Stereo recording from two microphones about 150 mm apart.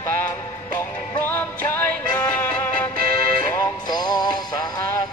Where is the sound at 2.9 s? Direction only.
85° right.